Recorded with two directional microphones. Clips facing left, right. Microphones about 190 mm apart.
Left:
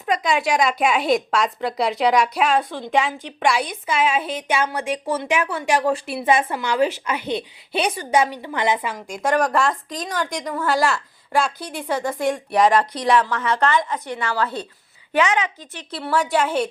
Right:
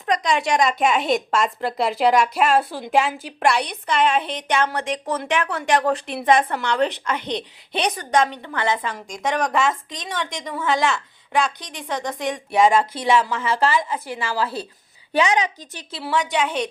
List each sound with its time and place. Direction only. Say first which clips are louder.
0.0 s a woman's voice: even; 5° left (ahead or behind)
15.1 s a woman's voice: even; 35° right (ahead or behind)
15.9 s a woman's voice: left 2 dB; centre (ahead or behind)